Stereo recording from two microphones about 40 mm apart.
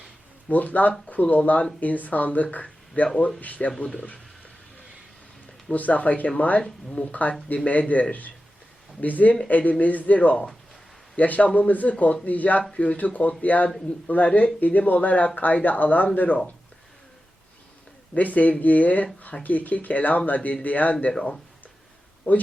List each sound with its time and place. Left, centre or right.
0.4 s speech: left
5.7 s speech: left
12.7 s speech: left
13.1 s speech: left
18.1 s speech: left
22.3 s speech: left